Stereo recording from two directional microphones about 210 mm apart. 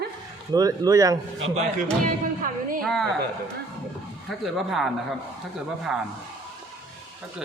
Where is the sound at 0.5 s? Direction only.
20° right (ahead or behind).